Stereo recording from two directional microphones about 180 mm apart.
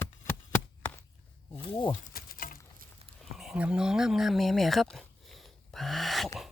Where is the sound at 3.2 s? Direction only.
Centre (ahead or behind).